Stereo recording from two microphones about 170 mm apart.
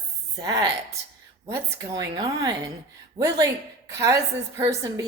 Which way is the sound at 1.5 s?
20° right (ahead or behind).